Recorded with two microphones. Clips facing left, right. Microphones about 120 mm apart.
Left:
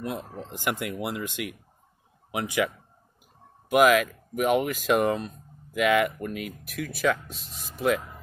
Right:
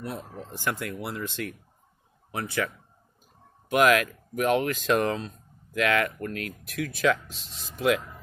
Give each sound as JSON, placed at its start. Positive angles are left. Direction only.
{"t": 0.5, "sound": "speech", "side_deg": 15}
{"t": 3.6, "sound": "speech", "side_deg": 0}